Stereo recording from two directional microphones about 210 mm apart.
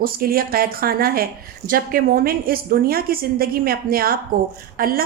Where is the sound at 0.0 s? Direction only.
45° right (ahead or behind).